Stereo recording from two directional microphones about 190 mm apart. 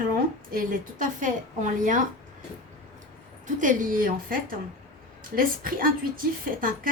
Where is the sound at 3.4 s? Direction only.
40° right (ahead or behind).